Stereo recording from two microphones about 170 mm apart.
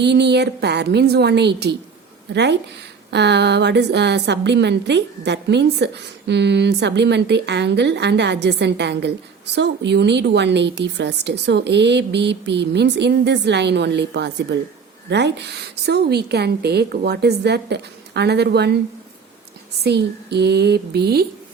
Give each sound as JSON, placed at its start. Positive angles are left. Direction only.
{"t": 0.0, "sound": "a woman's voice", "side_deg": -85}
{"t": 2.3, "sound": "a woman's voice", "side_deg": -90}
{"t": 19.8, "sound": "a woman's voice", "side_deg": -75}